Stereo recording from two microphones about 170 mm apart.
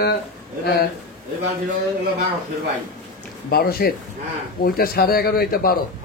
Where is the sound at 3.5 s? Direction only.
65° left (ahead or behind).